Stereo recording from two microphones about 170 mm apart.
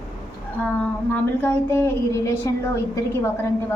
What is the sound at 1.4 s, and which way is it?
A woman's voice, 15° left (ahead or behind).